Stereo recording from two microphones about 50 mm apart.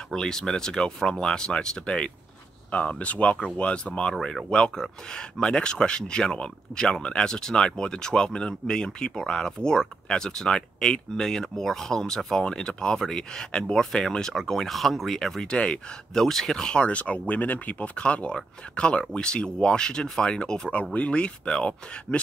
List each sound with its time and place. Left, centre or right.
0.1 s speech: centre
15.4 s speech: left
16.1 s speech: centre
16.8 s speech: left
20.9 s speech: left